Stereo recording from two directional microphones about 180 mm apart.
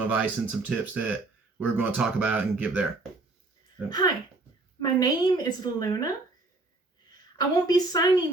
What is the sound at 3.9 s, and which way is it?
A woman's voice, 20° left (ahead or behind).